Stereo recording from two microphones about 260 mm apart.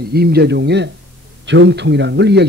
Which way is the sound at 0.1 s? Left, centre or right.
Right.